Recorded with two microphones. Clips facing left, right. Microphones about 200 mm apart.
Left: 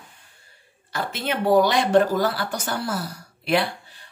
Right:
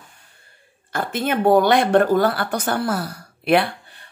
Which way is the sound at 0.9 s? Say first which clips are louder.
Right 5 dB; 50° right (ahead or behind).